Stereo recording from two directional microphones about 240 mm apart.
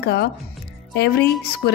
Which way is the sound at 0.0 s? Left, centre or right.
Left.